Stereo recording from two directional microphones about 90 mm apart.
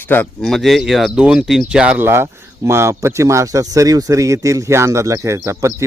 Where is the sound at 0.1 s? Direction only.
20° left (ahead or behind).